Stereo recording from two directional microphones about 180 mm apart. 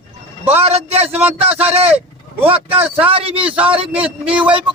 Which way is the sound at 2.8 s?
10° right (ahead or behind).